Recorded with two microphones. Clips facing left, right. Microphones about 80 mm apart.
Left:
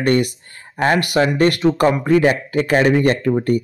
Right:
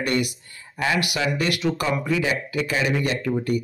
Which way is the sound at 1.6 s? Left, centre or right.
Left.